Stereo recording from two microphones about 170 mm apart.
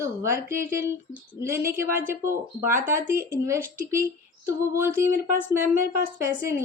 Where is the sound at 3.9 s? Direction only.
15° right (ahead or behind).